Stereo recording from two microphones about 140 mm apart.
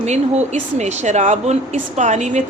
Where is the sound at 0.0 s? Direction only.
55° right (ahead or behind).